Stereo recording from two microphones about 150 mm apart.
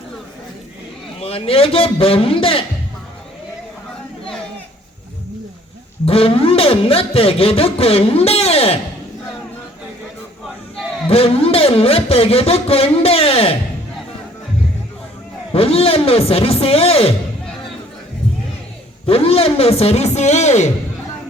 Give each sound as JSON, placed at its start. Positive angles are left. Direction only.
{"t": 1.2, "sound": "speech", "side_deg": 40}
{"t": 6.1, "sound": "speech", "side_deg": 40}
{"t": 11.1, "sound": "speech", "side_deg": 40}
{"t": 15.5, "sound": "speech", "side_deg": 40}
{"t": 19.0, "sound": "a man's voice", "side_deg": 40}